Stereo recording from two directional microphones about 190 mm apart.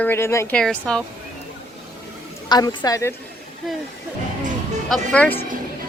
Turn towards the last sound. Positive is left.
turn(degrees=5)  # may be behind; listen again after turning